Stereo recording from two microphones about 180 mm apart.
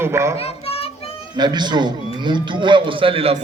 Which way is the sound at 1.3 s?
25° right (ahead or behind).